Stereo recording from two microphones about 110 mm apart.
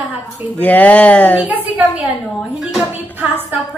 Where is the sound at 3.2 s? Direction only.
15° right (ahead or behind).